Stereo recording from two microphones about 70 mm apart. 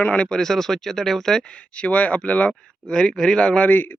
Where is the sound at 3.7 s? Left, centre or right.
Left.